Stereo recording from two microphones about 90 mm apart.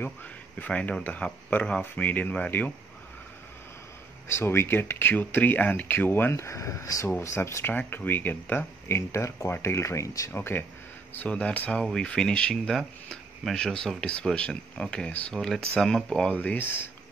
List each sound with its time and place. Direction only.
0.0 s speech: 20° left (ahead or behind)
4.3 s speech: 30° left (ahead or behind)
7.7 s speech: 20° left (ahead or behind); by 10.3 s 35° left (ahead or behind)
10.3 s speech: 25° left (ahead or behind)
11.1 s speech: 15° left (ahead or behind)
15.7 s speech: 5° left (ahead or behind)
16.3 s speech: 20° left (ahead or behind)